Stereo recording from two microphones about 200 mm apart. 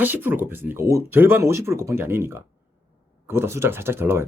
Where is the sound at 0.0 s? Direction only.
10° right (ahead or behind).